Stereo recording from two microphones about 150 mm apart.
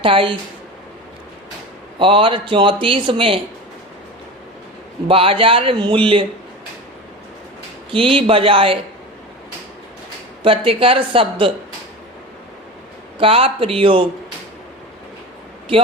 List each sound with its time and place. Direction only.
0.0 s speech: 35° right (ahead or behind)
2.0 s speech: 35° right (ahead or behind)
5.0 s speech: 35° right (ahead or behind)
7.9 s speech: 35° right (ahead or behind)
10.4 s speech: 35° right (ahead or behind)
13.1 s speech: 40° right (ahead or behind)